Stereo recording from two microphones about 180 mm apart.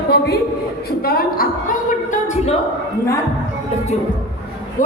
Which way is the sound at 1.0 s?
55° left (ahead or behind).